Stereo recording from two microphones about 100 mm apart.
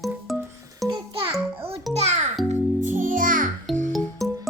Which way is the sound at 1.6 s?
75° right (ahead or behind).